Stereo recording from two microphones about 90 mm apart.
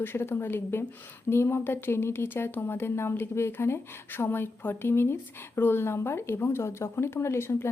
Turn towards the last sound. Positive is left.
turn(degrees=30)  # may be behind; listen again after turning